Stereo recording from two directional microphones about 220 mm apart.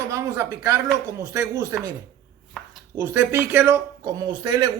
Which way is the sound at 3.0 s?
10° right (ahead or behind).